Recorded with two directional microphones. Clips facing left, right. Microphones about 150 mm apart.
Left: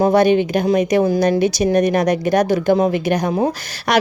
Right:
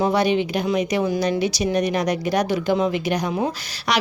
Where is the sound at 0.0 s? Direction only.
50° left (ahead or behind).